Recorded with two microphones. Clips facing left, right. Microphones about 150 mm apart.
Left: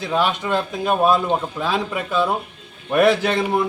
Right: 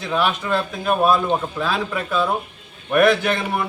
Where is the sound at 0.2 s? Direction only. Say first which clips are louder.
Even; 20° left (ahead or behind).